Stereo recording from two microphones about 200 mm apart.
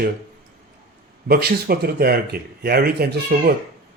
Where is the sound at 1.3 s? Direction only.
50° right (ahead or behind).